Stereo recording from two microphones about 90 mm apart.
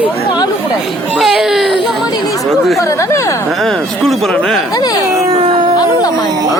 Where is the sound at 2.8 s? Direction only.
35° left (ahead or behind).